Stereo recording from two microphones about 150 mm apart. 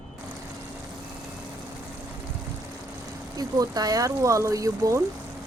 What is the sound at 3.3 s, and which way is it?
Speech, 25° right (ahead or behind).